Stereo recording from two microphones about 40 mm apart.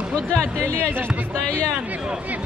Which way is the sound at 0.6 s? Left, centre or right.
Right.